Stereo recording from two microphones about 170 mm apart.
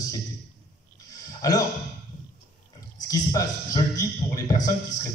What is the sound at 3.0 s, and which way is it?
A man's voice, 20° left (ahead or behind).